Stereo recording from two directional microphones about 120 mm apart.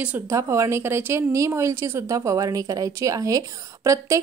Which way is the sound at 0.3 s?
25° right (ahead or behind).